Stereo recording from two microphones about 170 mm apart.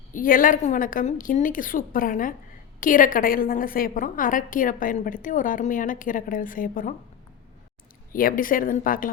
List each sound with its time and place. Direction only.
0.1 s a woman's voice: 55° left (ahead or behind)
8.1 s speech: 55° left (ahead or behind)